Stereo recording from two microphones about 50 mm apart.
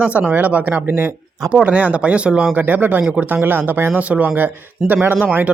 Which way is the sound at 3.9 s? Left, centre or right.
Right.